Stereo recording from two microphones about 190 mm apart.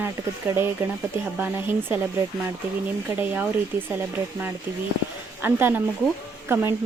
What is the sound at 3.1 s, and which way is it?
Speech, 10° right (ahead or behind).